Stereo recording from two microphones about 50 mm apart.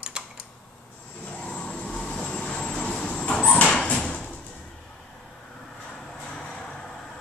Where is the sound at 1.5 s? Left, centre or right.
Centre.